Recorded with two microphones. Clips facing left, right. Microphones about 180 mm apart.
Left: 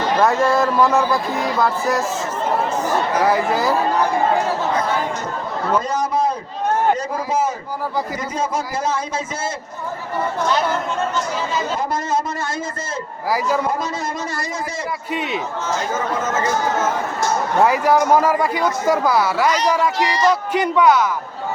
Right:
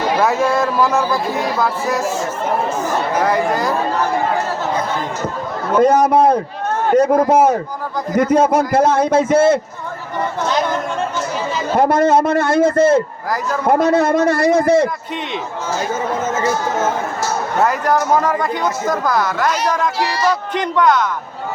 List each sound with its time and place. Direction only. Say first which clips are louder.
0.1 s speech: even; 5° right (ahead or behind)
3.2 s speech: right 1 dB; 5° left (ahead or behind)
5.8 s a man's voice: right 9 dB; 65° right (ahead or behind)
11.7 s a man's voice: right 14 dB; 65° right (ahead or behind)
17.7 s speech: left 2 dB; 10° left (ahead or behind)
20.0 s speech: even; 10° right (ahead or behind)
20.5 s speech: even; 10° left (ahead or behind)